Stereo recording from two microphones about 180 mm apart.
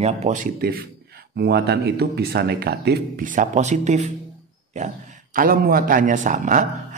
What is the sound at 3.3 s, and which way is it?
A man's voice, 45° right (ahead or behind).